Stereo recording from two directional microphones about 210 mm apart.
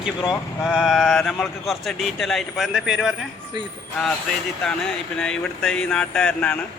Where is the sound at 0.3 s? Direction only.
Centre (ahead or behind).